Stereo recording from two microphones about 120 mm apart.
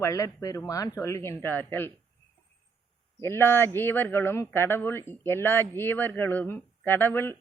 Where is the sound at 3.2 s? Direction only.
20° left (ahead or behind).